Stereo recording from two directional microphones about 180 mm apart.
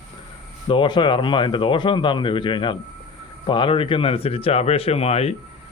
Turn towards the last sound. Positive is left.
turn(degrees=35)  # may be behind; listen again after turning